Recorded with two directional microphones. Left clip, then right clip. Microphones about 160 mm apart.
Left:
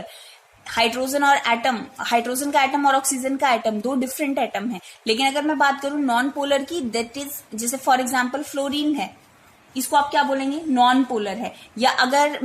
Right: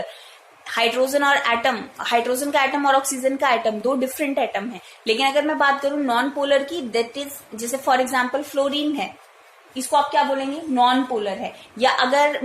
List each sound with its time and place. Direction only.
0.6 s a woman's voice: 30° left (ahead or behind)
9.7 s a woman's voice: 45° left (ahead or behind)